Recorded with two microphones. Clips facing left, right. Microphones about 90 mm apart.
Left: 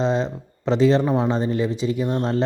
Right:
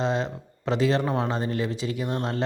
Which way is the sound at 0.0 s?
20° left (ahead or behind).